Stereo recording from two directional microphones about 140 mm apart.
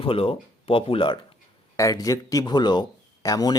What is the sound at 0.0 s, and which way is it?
Speech, 40° left (ahead or behind).